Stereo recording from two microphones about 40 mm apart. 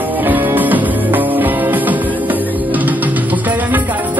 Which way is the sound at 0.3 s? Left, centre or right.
Right.